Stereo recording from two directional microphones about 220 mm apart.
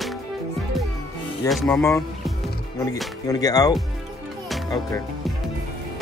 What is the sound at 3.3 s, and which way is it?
Speech, 15° left (ahead or behind).